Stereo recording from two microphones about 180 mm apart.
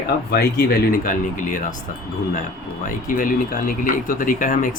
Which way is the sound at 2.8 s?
50° left (ahead or behind).